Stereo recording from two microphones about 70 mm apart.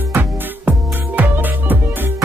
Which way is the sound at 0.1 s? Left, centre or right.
Right.